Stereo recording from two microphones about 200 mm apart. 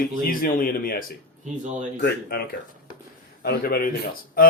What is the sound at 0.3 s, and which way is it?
Speech, 45° left (ahead or behind).